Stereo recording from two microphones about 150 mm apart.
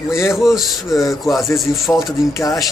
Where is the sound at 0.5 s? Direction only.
Centre (ahead or behind).